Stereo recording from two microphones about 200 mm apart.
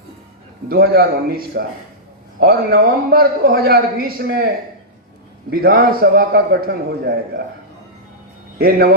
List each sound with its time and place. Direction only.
0.7 s a man's voice: 50° right (ahead or behind)
5.5 s a man's voice: 50° right (ahead or behind)
8.5 s a man's voice: 50° right (ahead or behind)